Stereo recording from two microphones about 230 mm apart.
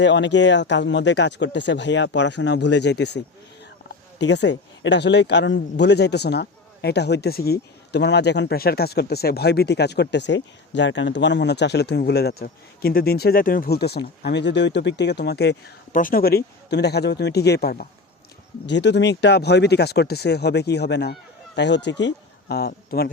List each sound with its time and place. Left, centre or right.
0.0 s speech: left
4.2 s speech: left